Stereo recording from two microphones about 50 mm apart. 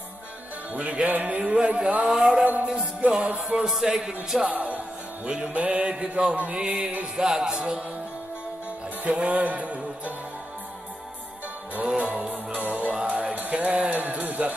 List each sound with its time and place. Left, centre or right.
0.7 s music: right
3.6 s speech: centre
4.5 s music: right
7.2 s speech: centre
9.0 s music: right
12.0 s music: right
13.5 s speech: right